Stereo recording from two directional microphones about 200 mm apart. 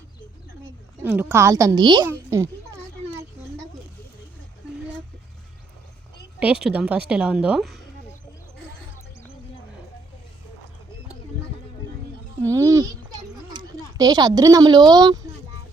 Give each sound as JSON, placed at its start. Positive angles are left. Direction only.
{"t": 1.0, "sound": "a woman's voice", "side_deg": -10}
{"t": 6.4, "sound": "a woman's voice", "side_deg": -5}
{"t": 12.5, "sound": "a child's voice", "side_deg": -15}